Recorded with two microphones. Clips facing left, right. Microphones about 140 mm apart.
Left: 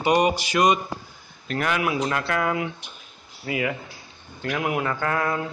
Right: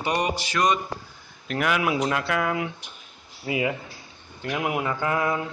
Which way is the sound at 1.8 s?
15° right (ahead or behind).